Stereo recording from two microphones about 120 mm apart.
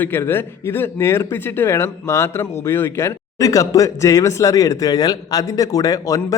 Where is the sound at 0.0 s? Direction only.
20° left (ahead or behind).